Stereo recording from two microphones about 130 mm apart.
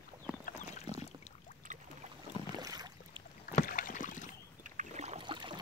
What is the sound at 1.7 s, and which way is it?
Boat, 90° right.